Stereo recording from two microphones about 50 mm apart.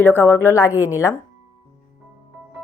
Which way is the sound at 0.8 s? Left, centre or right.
Left.